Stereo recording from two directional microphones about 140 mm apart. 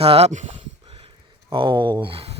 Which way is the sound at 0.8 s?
35° right (ahead or behind).